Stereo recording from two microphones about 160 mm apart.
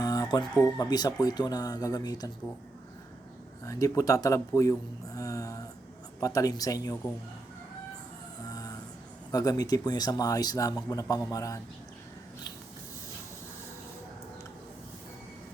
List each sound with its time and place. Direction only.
0.0 s chicken: 25° left (ahead or behind)
0.6 s a man's voice: 25° left (ahead or behind)
3.6 s a man's voice: 20° left (ahead or behind)
9.3 s a man's voice: 25° left (ahead or behind)